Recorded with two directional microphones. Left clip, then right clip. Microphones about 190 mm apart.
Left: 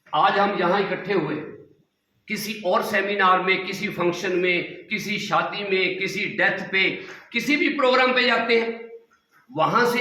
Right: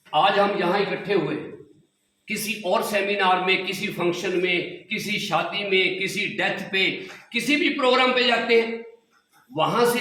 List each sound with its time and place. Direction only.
0.1 s a man's voice: 20° right (ahead or behind)
2.2 s a man's voice: 15° right (ahead or behind)